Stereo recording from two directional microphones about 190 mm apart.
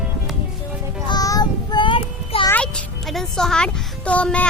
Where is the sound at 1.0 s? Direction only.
20° left (ahead or behind).